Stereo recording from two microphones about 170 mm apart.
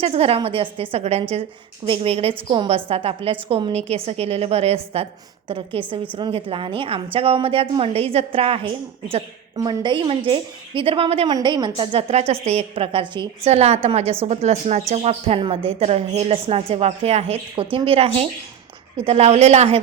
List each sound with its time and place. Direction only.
0.0 s a woman's voice: 35° right (ahead or behind)
9.6 s a woman's voice: 25° right (ahead or behind); by 19.8 s 40° right (ahead or behind)